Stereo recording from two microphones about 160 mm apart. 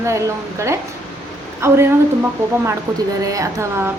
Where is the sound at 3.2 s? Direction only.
20° right (ahead or behind).